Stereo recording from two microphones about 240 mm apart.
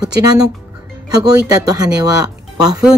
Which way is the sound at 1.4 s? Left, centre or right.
Centre.